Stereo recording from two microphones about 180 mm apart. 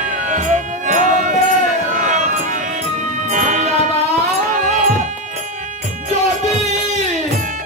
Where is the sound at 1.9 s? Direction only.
45° right (ahead or behind).